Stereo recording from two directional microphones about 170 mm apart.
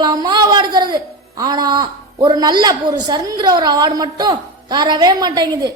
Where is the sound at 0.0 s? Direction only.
25° right (ahead or behind).